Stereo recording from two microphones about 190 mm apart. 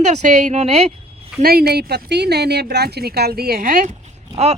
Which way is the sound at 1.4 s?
55° right (ahead or behind).